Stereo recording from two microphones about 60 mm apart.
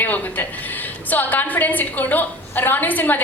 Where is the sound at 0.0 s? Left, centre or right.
Left.